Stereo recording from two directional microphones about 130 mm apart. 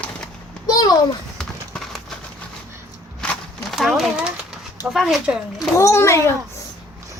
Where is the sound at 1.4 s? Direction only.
5° left (ahead or behind).